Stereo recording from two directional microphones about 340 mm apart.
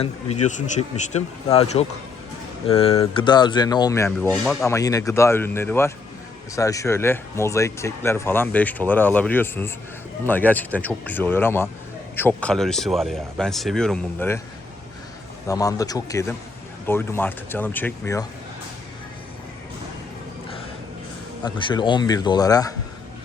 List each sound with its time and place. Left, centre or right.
0.0 s speech: centre
15.4 s speech: centre
21.4 s speech: centre